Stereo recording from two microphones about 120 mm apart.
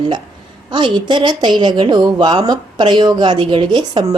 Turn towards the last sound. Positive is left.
turn(degrees=-35)  # may be behind; listen again after turning